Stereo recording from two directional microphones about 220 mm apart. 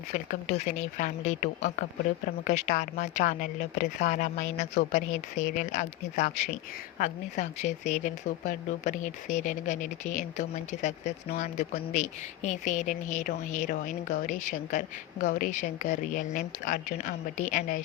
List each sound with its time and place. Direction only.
0.1 s speech: 35° left (ahead or behind)